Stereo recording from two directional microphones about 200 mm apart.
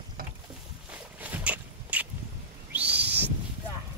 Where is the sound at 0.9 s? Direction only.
10° right (ahead or behind).